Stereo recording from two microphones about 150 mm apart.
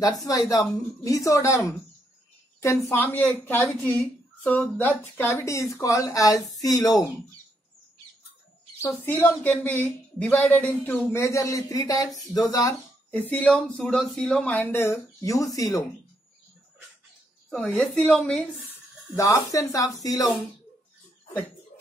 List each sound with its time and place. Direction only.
0.5 s a woman's voice: 25° left (ahead or behind)
8.8 s a woman's voice: 15° left (ahead or behind)
13.1 s a woman's voice: 10° left (ahead or behind)
17.5 s a woman's voice: 5° left (ahead or behind)
18.7 s speech: 20° left (ahead or behind)